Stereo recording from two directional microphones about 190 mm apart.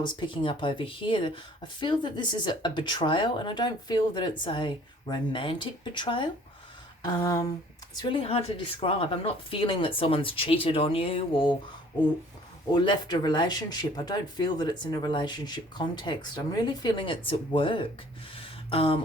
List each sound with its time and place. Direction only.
0.0 s speech: 25° left (ahead or behind)
12.7 s speech: 25° left (ahead or behind)
18.3 s a sound: 30° left (ahead or behind)